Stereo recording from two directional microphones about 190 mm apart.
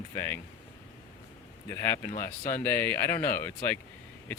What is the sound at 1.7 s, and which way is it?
Speech, 15° left (ahead or behind).